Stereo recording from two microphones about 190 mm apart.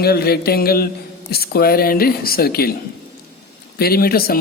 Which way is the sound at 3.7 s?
55° left (ahead or behind).